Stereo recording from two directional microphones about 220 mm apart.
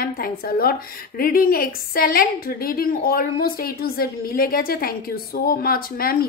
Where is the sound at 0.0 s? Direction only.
40° left (ahead or behind).